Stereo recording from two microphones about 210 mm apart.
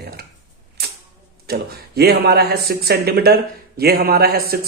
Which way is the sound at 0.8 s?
50° right (ahead or behind).